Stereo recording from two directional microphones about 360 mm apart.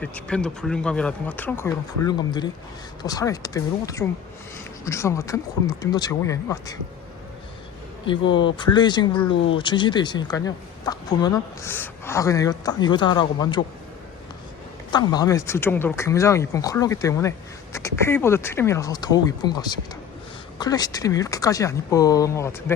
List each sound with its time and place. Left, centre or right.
0.0 s speech: centre
8.3 s speech: centre
9.3 s speech: left
9.6 s speech: centre
14.9 s speech: centre